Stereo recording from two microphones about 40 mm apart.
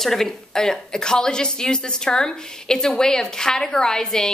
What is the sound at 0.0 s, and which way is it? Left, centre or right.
A woman's voice, centre.